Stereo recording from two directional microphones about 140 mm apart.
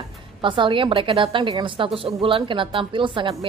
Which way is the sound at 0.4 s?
35° right (ahead or behind).